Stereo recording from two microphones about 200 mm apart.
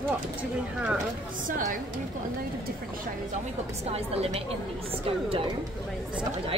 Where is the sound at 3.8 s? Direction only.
30° right (ahead or behind).